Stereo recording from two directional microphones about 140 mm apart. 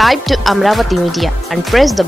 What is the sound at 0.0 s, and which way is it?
Speech, centre (ahead or behind).